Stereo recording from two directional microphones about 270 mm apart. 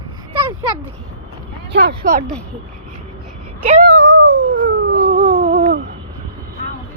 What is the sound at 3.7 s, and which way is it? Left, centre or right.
Cat, right.